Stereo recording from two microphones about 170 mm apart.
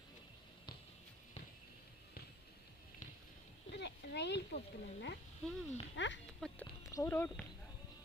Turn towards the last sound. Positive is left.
turn(degrees=15)  # may be behind; listen again after turning